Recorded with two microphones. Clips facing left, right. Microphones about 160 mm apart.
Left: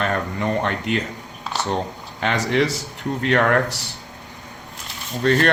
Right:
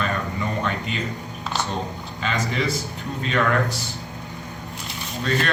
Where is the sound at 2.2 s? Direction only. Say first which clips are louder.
Left 6 dB; 75° left (ahead or behind).